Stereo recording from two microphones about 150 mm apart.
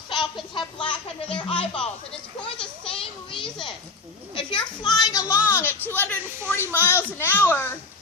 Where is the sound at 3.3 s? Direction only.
35° left (ahead or behind).